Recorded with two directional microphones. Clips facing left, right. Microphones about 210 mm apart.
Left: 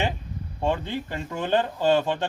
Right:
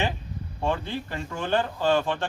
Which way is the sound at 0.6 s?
20° left (ahead or behind).